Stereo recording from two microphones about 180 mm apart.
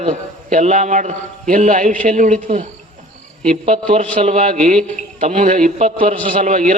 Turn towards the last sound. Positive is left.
turn(degrees=-45)  # may be behind; listen again after turning